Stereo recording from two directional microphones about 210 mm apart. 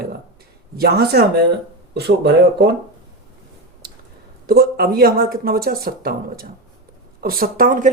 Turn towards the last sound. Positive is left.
turn(degrees=-40)  # may be behind; listen again after turning